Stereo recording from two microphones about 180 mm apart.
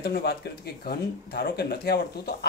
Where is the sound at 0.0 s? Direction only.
65° left (ahead or behind).